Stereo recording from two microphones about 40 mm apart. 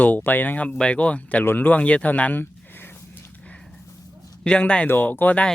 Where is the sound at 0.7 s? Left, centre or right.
Left.